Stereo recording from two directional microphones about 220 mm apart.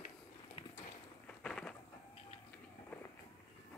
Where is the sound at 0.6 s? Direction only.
25° left (ahead or behind).